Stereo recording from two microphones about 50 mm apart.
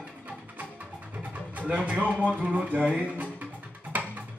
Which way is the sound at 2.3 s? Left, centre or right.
Right.